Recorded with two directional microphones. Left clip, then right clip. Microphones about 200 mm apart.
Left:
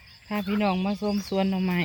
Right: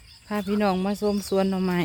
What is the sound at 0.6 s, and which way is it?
Speech, 20° right (ahead or behind).